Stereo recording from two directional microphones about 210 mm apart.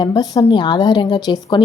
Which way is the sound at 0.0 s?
20° left (ahead or behind).